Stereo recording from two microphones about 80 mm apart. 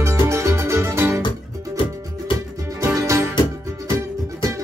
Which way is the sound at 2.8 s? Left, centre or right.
Right.